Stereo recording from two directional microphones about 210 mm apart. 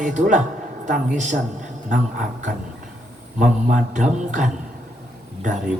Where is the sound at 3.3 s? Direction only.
35° right (ahead or behind).